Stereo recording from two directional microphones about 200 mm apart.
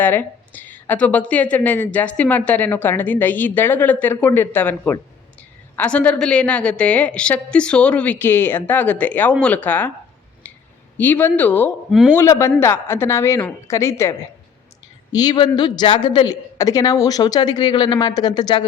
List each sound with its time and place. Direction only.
0.0 s a woman's voice: 10° left (ahead or behind)
10.9 s a woman's voice: 10° left (ahead or behind)